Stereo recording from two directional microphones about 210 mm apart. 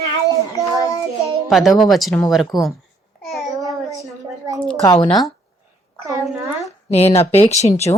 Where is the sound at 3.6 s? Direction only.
15° right (ahead or behind).